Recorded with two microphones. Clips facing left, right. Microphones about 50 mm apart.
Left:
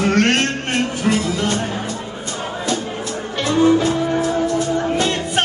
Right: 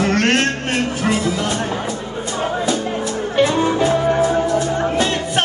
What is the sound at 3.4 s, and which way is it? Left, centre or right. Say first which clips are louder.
Music: left 1 dB; centre.